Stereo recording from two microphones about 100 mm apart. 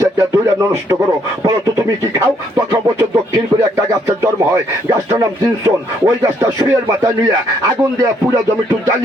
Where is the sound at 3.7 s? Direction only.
25° right (ahead or behind).